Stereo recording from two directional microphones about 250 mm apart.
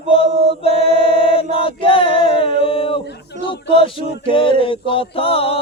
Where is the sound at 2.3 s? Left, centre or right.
Left.